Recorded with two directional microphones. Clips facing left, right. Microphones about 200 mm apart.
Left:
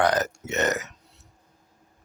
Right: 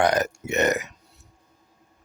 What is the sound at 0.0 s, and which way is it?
Burping, 15° right (ahead or behind).